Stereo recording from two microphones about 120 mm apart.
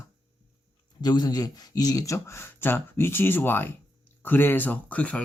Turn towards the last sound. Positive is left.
turn(degrees=10)  # may be behind; listen again after turning